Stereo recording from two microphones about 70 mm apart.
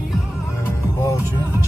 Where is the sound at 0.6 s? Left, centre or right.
Left.